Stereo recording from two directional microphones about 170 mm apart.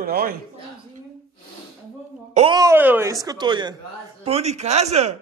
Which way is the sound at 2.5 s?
20° right (ahead or behind).